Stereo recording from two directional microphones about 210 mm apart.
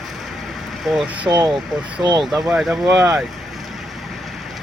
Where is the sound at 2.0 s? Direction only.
20° right (ahead or behind).